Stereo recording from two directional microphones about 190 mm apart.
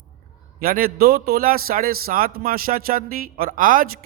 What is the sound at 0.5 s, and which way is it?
Speech, 50° right (ahead or behind).